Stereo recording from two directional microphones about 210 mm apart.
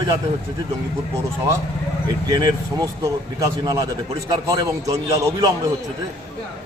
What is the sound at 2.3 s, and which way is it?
Speech, 15° right (ahead or behind).